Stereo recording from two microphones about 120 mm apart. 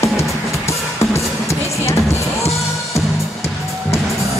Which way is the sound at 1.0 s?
25° left (ahead or behind).